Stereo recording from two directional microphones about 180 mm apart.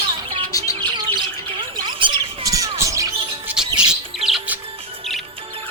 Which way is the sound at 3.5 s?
5° right (ahead or behind).